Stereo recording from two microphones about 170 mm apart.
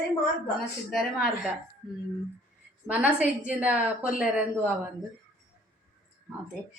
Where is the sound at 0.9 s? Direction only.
5° right (ahead or behind).